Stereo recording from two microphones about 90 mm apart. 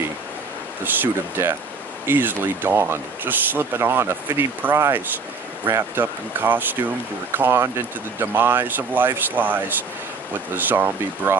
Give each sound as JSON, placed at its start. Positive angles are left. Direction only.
{"t": 0.8, "sound": "speech", "side_deg": -20}